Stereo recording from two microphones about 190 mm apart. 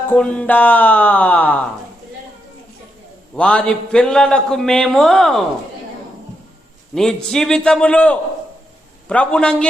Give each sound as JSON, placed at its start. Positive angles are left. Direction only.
{"t": 0.1, "sound": "speech", "side_deg": 5}
{"t": 3.3, "sound": "a man's voice", "side_deg": 5}
{"t": 6.9, "sound": "a man's voice", "side_deg": 0}